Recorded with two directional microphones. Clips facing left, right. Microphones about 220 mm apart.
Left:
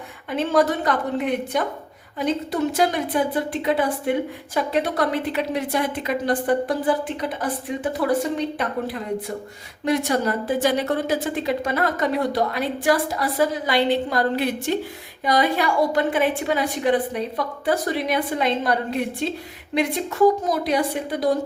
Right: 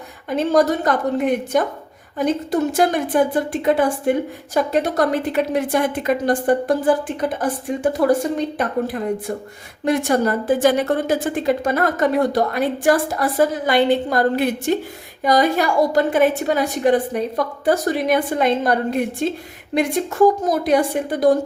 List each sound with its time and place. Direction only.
0.3 s a woman's voice: 40° right (ahead or behind)